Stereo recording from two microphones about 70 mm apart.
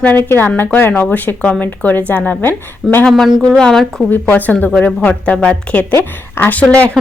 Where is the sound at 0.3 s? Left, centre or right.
Left.